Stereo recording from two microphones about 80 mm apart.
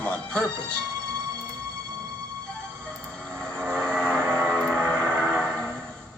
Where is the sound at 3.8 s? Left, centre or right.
Centre.